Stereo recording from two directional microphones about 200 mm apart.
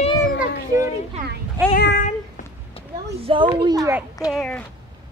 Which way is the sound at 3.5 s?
20° right (ahead or behind).